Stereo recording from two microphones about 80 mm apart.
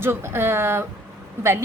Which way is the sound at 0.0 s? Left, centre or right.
Right.